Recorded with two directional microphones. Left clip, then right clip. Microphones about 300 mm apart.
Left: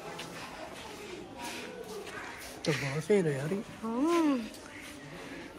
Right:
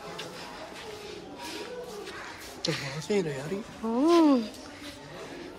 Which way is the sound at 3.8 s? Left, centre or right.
Centre.